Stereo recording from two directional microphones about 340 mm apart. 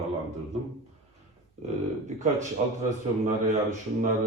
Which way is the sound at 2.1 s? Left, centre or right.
Right.